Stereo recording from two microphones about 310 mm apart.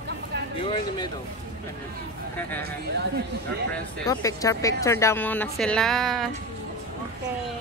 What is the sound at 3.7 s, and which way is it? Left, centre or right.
Speech, centre.